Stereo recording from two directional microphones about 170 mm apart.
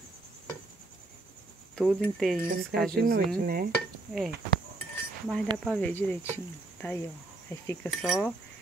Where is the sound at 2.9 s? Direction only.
60° right (ahead or behind).